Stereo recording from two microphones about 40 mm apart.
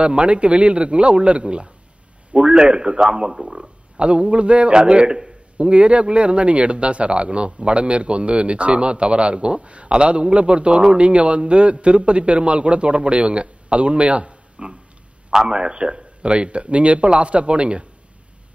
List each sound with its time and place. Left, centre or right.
0.0 s speech: right
4.0 s speech: right